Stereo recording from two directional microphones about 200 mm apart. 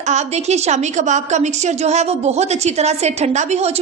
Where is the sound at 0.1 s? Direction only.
35° right (ahead or behind).